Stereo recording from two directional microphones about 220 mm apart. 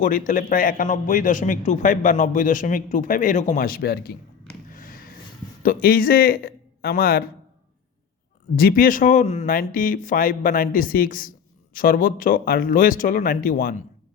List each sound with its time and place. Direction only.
0.0 s speech: 40° left (ahead or behind)
8.5 s speech: 40° left (ahead or behind)